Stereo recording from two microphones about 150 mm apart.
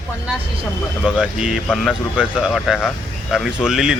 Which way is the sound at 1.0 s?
5° right (ahead or behind).